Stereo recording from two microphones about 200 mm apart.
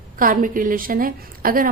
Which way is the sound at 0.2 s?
45° right (ahead or behind).